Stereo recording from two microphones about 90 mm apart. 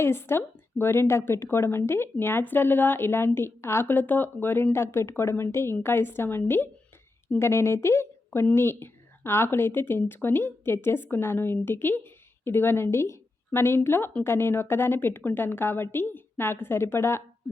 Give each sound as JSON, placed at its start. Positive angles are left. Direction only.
{"t": 0.0, "sound": "a woman's voice", "side_deg": 25}